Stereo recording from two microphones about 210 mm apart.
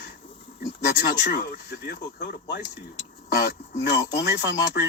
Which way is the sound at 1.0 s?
55° left (ahead or behind).